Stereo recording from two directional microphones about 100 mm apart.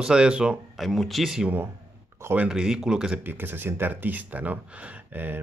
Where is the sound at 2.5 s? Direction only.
5° right (ahead or behind).